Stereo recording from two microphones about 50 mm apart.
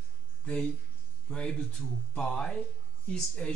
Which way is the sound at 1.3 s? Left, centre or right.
Centre.